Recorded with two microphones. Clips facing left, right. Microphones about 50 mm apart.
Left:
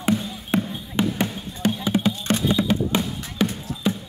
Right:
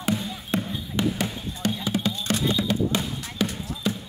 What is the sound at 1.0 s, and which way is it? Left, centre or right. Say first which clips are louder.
Basketball bounce: left 2 dB; left.